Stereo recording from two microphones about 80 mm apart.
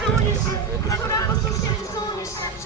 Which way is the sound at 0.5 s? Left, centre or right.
Left.